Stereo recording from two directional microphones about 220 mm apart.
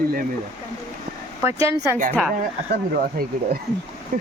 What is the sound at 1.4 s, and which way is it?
Speech, 15° right (ahead or behind).